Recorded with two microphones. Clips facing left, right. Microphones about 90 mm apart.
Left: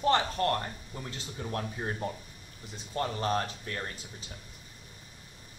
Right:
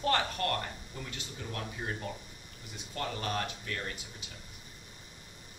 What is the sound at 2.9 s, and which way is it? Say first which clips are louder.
Speech: left 5 dB; 30° left (ahead or behind).